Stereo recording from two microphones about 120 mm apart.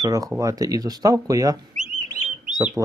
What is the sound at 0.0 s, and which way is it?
Speech, 30° right (ahead or behind).